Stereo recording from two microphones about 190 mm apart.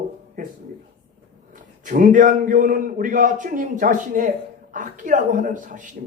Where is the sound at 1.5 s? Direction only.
45° right (ahead or behind).